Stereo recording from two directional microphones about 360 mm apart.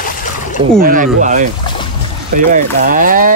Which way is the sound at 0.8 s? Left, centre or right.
Right.